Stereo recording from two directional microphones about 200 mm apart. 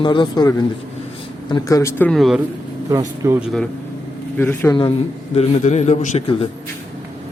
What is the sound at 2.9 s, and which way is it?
Speech, 15° right (ahead or behind).